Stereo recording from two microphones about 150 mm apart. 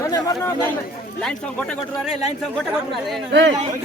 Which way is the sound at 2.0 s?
5° right (ahead or behind).